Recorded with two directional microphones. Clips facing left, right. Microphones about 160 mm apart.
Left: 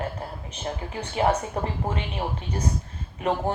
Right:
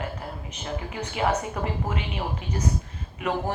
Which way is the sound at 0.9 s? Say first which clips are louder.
Left 2 dB; 30° left (ahead or behind).